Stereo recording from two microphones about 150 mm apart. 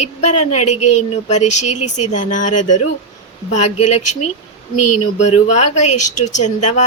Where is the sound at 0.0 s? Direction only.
50° left (ahead or behind).